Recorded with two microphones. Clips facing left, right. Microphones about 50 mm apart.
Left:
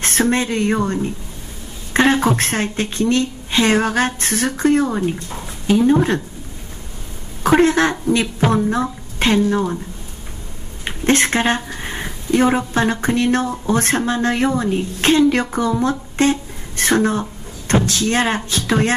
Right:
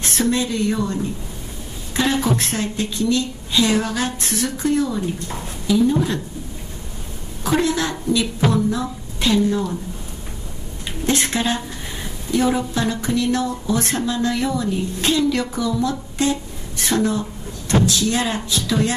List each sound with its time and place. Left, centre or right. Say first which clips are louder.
0.0 s speech: left 3 dB; left
2.0 s a woman's voice: left 5 dB; left
7.4 s a woman's voice: left 6 dB; left
10.9 s a woman's voice: left 5 dB; left